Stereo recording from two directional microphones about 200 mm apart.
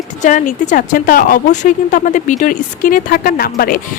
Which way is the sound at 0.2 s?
40° left (ahead or behind).